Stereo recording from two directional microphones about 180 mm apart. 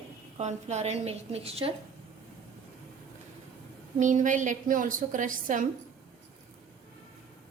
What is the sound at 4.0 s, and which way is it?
A woman's voice, 45° right (ahead or behind).